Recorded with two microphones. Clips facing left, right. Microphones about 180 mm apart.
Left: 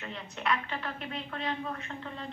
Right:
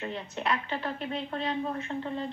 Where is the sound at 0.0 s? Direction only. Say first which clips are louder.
Right 3 dB; 35° right (ahead or behind).